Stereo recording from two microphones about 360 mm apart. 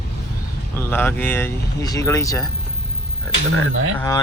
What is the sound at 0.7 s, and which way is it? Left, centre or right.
Speech, centre.